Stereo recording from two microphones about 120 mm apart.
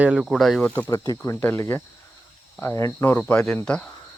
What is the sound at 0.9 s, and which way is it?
Speech, 25° left (ahead or behind).